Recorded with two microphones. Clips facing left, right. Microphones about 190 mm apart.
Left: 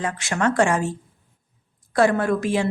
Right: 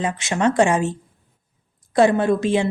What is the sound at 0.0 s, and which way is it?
A woman's voice, 20° right (ahead or behind).